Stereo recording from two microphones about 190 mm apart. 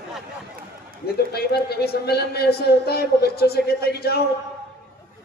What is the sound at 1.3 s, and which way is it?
Speech, 55° left (ahead or behind).